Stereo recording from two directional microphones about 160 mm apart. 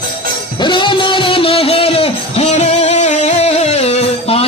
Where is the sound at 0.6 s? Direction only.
30° left (ahead or behind).